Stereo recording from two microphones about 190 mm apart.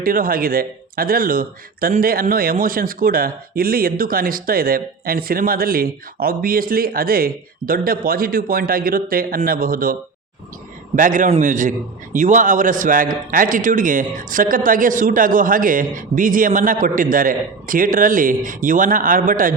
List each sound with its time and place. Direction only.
0.0 s speech: 50° right (ahead or behind)